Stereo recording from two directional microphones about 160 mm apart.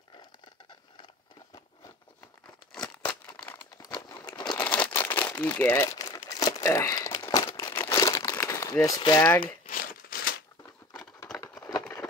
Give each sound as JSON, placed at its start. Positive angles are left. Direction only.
{"t": 3.0, "sound": "crumpling", "side_deg": 15}
{"t": 4.3, "sound": "crumpling", "side_deg": 25}
{"t": 4.6, "sound": "crumpling", "side_deg": 10}
{"t": 9.4, "sound": "crumpling", "side_deg": 60}